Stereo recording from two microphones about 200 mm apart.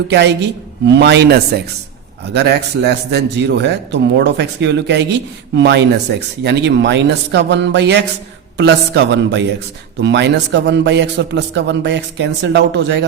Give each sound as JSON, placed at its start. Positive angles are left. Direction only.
{"t": 0.1, "sound": "a man's voice", "side_deg": -60}